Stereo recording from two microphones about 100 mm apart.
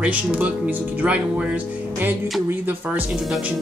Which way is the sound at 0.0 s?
15° right (ahead or behind).